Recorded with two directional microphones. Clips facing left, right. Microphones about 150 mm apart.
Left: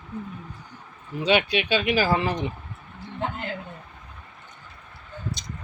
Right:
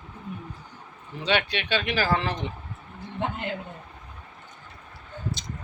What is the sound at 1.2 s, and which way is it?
Speech, 10° left (ahead or behind).